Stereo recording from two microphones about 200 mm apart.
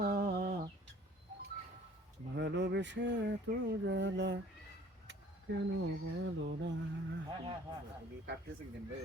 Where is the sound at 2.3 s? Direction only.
55° right (ahead or behind).